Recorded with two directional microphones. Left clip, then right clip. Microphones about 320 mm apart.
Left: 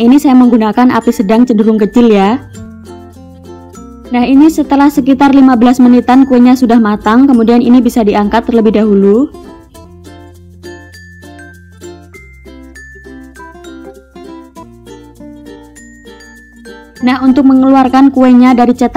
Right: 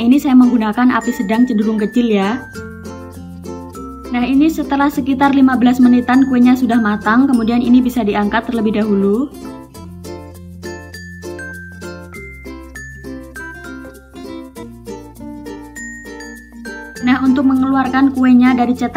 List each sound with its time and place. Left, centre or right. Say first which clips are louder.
0.0 s a woman's voice: left 5 dB; left
4.1 s a woman's voice: left 7 dB; left
17.0 s a woman's voice: left 5 dB; left